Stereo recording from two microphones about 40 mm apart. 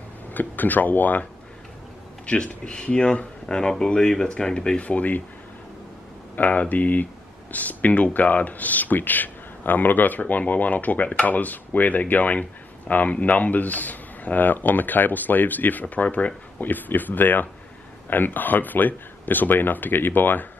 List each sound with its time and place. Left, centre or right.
0.3 s speech: left
2.2 s speech: left
4.7 s speech: left
6.3 s speech: left
16.5 s speech: left